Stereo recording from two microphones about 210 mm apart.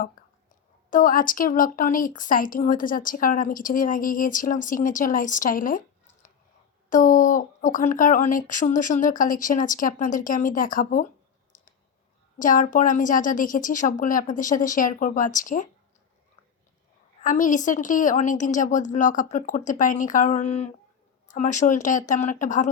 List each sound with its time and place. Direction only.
0.9 s speech: 40° left (ahead or behind)
6.9 s speech: 40° left (ahead or behind)
11.5 s clicking: 40° left (ahead or behind)
12.4 s speech: 40° left (ahead or behind)
17.2 s speech: 40° left (ahead or behind)